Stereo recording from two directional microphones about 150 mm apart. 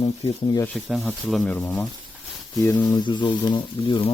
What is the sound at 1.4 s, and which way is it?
Speech, 10° left (ahead or behind).